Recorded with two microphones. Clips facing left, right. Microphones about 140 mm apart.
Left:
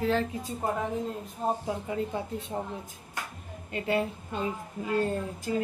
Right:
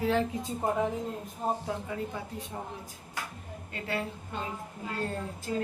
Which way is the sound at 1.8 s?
25° left (ahead or behind).